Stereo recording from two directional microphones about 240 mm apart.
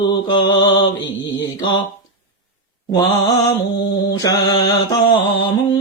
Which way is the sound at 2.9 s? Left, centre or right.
Centre.